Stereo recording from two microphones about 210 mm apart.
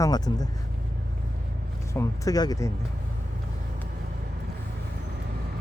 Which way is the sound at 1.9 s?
15° left (ahead or behind).